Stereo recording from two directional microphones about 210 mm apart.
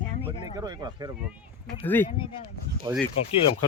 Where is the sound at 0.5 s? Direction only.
20° right (ahead or behind).